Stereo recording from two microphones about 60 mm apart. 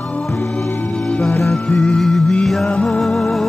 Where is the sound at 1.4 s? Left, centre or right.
Centre.